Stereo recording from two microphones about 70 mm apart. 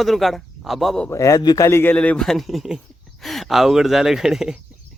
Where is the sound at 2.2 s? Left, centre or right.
Centre.